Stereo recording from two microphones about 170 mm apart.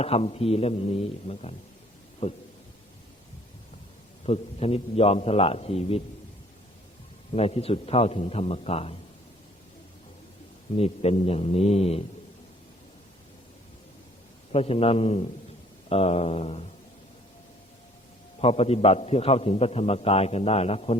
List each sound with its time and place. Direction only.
0.0 s a man's voice: 35° left (ahead or behind)
4.3 s a man's voice: 35° left (ahead or behind)
7.3 s a man's voice: 35° left (ahead or behind)
10.8 s a man's voice: 35° left (ahead or behind)
14.5 s a man's voice: 35° left (ahead or behind)
18.3 s a man's voice: 35° left (ahead or behind)